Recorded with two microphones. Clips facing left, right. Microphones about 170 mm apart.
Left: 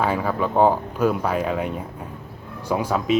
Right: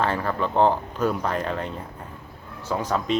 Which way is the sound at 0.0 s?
10° left (ahead or behind).